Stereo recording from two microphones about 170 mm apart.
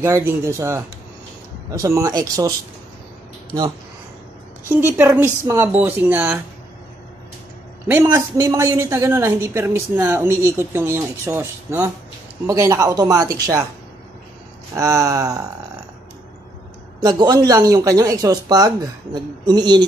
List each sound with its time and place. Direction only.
0.0 s a woman's voice: 15° right (ahead or behind)
4.6 s a woman's voice: 10° right (ahead or behind)
7.9 s a woman's voice: 20° right (ahead or behind)
14.7 s a woman's voice: 20° right (ahead or behind)
17.0 s speech: 25° right (ahead or behind)